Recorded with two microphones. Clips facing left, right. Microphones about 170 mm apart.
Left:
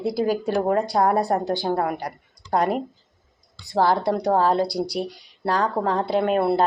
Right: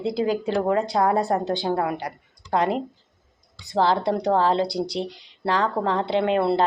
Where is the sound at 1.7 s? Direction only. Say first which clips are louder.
Left 1 dB; 45° left (ahead or behind).